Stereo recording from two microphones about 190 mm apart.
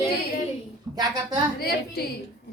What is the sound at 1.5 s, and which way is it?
Speech, 55° left (ahead or behind).